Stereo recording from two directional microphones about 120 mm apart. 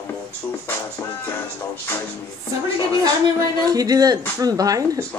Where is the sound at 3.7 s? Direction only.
30° right (ahead or behind).